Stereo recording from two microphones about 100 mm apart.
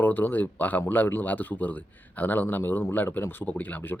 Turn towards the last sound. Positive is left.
turn(degrees=20)  # may be behind; listen again after turning